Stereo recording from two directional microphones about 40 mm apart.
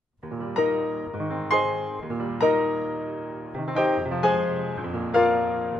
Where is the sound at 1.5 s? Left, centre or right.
Centre.